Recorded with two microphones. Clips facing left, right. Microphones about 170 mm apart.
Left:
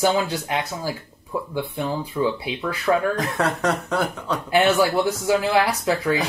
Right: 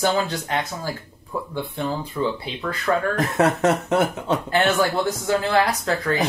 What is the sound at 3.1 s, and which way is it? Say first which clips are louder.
Speech: right 4 dB; 25° right (ahead or behind).